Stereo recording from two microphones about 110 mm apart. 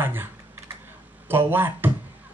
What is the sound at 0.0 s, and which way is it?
Typing, 20° right (ahead or behind).